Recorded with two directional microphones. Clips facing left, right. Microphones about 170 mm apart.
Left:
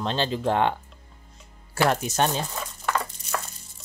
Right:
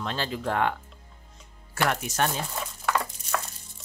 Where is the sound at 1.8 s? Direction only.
25° left (ahead or behind).